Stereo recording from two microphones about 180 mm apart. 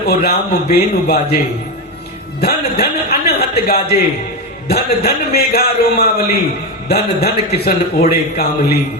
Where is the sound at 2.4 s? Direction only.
60° left (ahead or behind).